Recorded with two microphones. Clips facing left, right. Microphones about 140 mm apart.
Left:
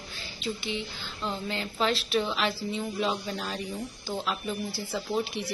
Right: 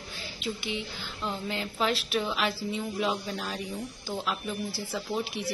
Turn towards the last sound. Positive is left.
turn(degrees=-5)  # may be behind; listen again after turning